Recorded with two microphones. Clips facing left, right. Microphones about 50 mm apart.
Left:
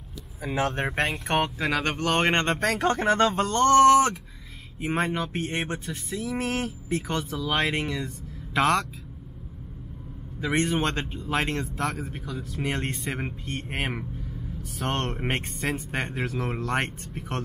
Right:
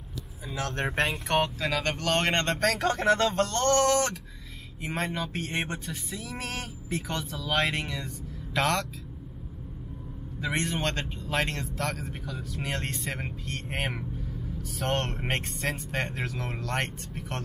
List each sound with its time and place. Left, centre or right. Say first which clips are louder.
0.7 s speech: left 1 dB; centre
1.3 s speech: left 2 dB; left
2.6 s speech: left 1 dB; centre
5.2 s a sound: left 2 dB; centre
6.3 s speech: left 8 dB; centre
10.4 s speech: left 4 dB; centre